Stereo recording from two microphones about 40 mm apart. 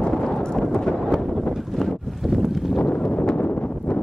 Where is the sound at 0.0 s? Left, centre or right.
Centre.